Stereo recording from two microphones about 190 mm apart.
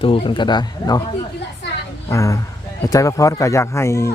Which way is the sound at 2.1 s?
15° left (ahead or behind).